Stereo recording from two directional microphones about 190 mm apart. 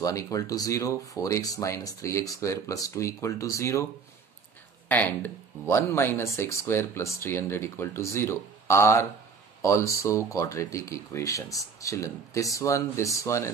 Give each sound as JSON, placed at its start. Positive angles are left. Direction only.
{"t": 0.0, "sound": "speech", "side_deg": 15}
{"t": 4.8, "sound": "speech", "side_deg": 10}